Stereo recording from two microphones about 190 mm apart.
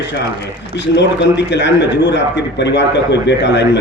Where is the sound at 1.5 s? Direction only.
65° left (ahead or behind).